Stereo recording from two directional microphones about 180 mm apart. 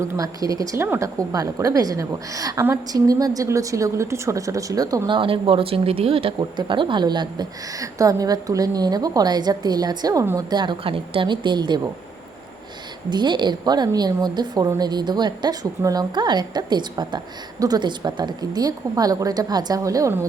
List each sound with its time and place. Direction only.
0.0 s a woman's voice: 20° right (ahead or behind)
13.1 s a woman's voice: 25° right (ahead or behind)